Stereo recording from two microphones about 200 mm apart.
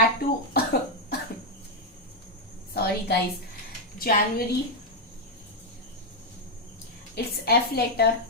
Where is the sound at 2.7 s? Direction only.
50° left (ahead or behind).